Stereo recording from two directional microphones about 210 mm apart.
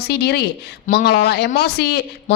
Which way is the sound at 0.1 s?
50° left (ahead or behind).